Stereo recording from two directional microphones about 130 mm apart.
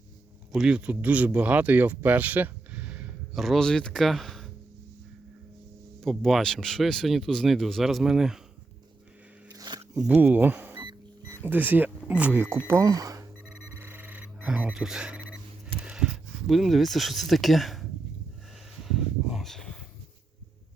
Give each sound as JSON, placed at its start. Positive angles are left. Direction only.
{"t": 0.5, "sound": "speech", "side_deg": -5}
{"t": 3.4, "sound": "speech", "side_deg": 0}
{"t": 6.0, "sound": "speech", "side_deg": 0}
{"t": 9.5, "sound": "a sound", "side_deg": -30}
{"t": 10.1, "sound": "speech", "side_deg": -15}
{"t": 13.5, "sound": "alarm clock", "side_deg": -15}
{"t": 15.8, "sound": "speech", "side_deg": -5}
{"t": 18.9, "sound": "a sound", "side_deg": 0}